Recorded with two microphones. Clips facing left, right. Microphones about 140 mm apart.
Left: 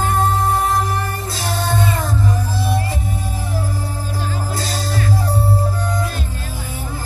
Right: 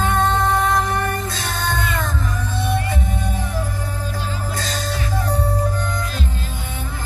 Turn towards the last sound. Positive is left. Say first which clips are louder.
# left 2 dB
turn(degrees=35)  # may be behind; listen again after turning